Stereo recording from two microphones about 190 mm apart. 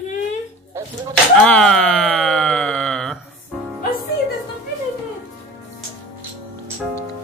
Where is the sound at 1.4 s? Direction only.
5° left (ahead or behind).